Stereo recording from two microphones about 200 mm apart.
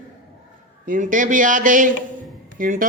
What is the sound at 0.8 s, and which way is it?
A man's voice, 40° right (ahead or behind).